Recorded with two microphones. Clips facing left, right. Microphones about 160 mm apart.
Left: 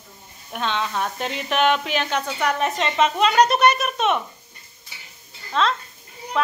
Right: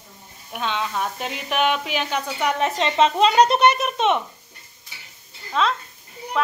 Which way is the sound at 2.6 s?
25° right (ahead or behind).